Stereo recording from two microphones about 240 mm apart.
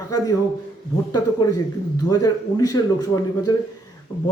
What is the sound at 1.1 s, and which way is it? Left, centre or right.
Speech, centre.